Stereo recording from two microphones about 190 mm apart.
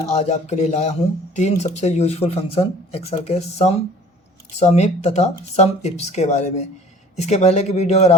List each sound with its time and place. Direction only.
0.1 s speech: 35° left (ahead or behind)